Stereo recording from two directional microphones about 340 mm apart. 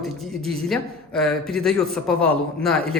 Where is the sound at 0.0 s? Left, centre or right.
Centre.